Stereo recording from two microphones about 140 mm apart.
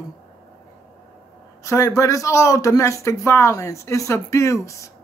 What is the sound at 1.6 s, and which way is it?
A woman's voice, 20° left (ahead or behind).